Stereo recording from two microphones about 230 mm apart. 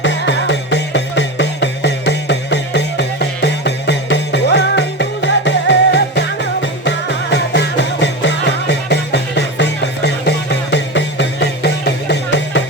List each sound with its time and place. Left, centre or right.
0.0 s music: left